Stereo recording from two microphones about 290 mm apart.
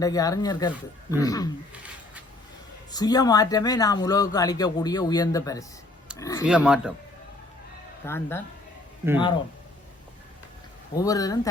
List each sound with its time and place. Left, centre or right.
0.0 s a man's voice: centre
2.9 s a man's voice: centre
6.4 s speech: centre
8.0 s a man's voice: centre
10.9 s a man's voice: centre